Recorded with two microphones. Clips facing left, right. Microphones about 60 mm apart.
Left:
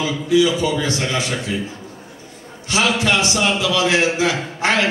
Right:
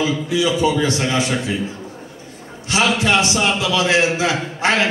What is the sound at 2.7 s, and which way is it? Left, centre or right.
Speech, right.